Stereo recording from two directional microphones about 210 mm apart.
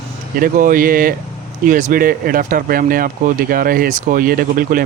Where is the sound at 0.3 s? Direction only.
40° right (ahead or behind).